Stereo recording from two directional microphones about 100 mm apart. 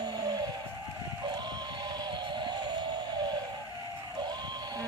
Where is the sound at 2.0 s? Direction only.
45° right (ahead or behind).